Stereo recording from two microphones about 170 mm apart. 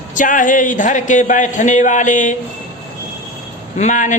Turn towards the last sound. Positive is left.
turn(degrees=45)  # may be behind; listen again after turning